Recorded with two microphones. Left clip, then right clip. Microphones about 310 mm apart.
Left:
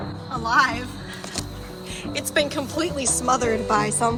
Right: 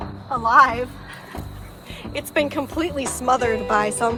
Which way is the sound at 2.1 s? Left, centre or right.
Right.